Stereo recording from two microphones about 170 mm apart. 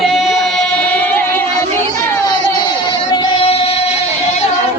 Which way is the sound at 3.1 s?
30° left (ahead or behind).